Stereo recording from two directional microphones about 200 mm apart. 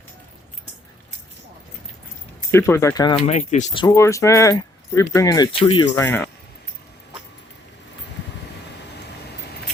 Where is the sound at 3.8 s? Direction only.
15° left (ahead or behind).